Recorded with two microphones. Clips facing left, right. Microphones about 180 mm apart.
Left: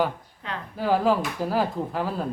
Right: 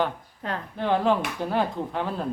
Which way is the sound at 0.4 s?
45° right (ahead or behind).